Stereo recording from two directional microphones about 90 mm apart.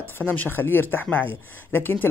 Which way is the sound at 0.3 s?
20° left (ahead or behind).